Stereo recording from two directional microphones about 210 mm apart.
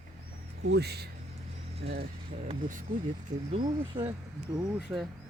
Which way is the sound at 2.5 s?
40° right (ahead or behind).